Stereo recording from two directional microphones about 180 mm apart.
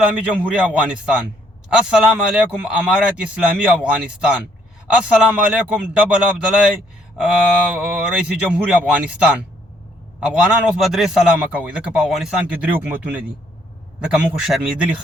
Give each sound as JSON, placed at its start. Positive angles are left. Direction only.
{"t": 0.0, "sound": "a man's voice", "side_deg": -5}